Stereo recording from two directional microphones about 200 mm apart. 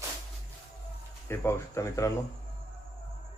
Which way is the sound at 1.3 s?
15° left (ahead or behind).